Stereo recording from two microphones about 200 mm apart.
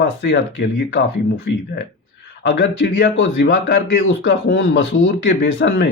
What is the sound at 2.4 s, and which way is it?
Speech, 65° left (ahead or behind).